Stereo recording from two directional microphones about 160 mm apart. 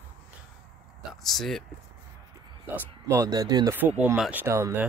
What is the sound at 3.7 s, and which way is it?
Speech, 10° right (ahead or behind).